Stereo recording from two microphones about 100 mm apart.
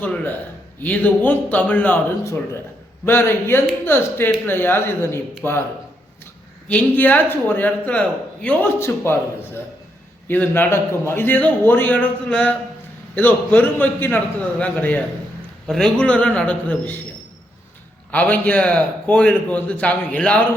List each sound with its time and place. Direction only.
0.0 s a man's voice: 15° left (ahead or behind)
3.1 s a man's voice: 25° left (ahead or behind)
6.7 s a man's voice: 15° left (ahead or behind)
10.2 s a man's voice: 20° left (ahead or behind)
18.1 s a man's voice: 15° left (ahead or behind)